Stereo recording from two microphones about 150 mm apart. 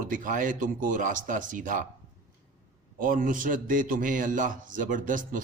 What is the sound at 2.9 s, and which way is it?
Speech, 65° right (ahead or behind).